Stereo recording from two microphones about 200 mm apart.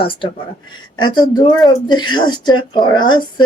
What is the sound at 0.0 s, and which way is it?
A woman's voice, 25° left (ahead or behind).